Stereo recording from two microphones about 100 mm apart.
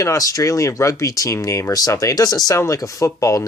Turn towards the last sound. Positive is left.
turn(degrees=35)  # may be behind; listen again after turning